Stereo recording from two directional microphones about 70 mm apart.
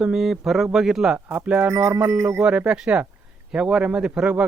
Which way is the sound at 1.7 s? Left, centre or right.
Right.